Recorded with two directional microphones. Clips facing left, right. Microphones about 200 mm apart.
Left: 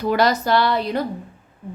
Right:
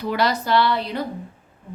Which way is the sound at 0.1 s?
45° left (ahead or behind).